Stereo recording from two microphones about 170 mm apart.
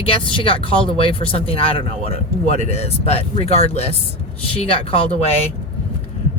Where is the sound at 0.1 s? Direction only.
30° left (ahead or behind).